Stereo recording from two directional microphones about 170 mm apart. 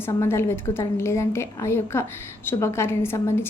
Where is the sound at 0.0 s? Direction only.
15° left (ahead or behind).